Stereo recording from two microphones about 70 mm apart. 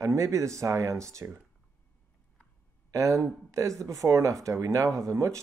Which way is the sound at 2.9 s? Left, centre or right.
Right.